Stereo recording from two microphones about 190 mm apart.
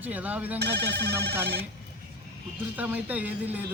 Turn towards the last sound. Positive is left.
turn(degrees=-10)  # may be behind; listen again after turning